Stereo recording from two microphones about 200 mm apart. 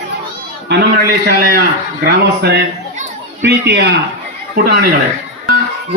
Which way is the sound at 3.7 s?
55° right (ahead or behind).